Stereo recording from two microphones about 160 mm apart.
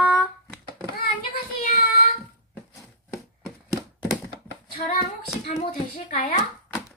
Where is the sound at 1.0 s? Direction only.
65° left (ahead or behind).